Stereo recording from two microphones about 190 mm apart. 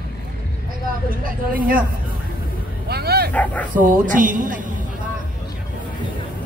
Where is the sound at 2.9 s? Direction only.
55° right (ahead or behind).